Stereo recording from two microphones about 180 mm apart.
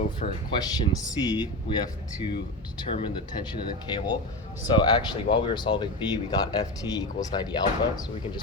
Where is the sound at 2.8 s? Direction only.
30° left (ahead or behind).